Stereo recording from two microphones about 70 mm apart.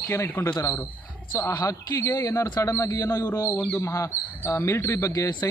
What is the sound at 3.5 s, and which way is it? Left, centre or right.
Speech, centre.